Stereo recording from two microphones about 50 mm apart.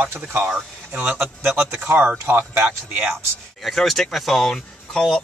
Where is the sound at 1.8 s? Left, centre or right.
Right.